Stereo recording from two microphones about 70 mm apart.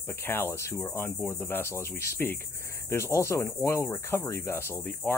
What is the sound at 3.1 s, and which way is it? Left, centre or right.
Cricket, left.